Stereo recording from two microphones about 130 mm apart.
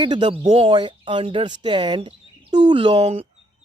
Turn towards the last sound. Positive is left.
turn(degrees=-40)  # may be behind; listen again after turning